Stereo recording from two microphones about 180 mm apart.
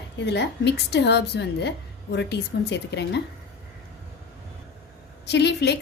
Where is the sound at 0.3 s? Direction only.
70° left (ahead or behind).